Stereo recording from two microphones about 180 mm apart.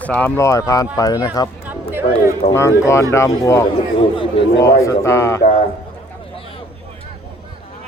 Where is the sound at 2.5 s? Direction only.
15° left (ahead or behind).